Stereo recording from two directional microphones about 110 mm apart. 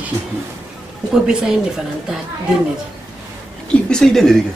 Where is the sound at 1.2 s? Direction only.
5° right (ahead or behind).